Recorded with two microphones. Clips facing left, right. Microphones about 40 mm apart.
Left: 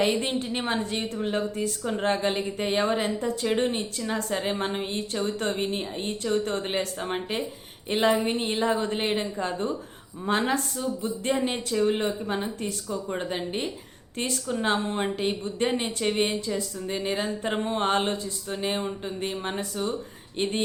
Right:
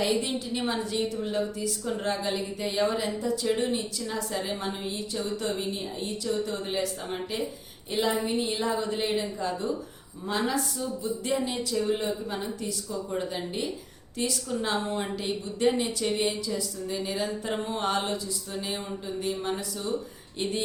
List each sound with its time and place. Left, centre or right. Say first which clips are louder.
0.0 s a woman's voice: left 2 dB; left